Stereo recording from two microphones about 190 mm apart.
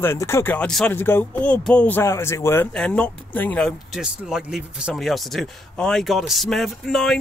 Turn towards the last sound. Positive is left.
turn(degrees=0)  # may be behind; listen again after turning